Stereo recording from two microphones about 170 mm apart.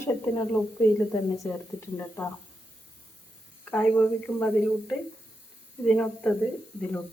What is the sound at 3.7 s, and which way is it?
Speech, 10° left (ahead or behind).